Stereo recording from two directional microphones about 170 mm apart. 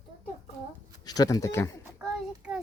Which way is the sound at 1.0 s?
20° left (ahead or behind).